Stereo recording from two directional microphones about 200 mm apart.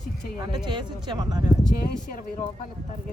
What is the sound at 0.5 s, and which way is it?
Speech, 20° right (ahead or behind).